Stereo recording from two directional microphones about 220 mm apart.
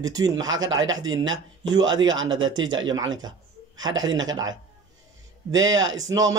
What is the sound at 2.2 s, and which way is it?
Speech, 20° right (ahead or behind).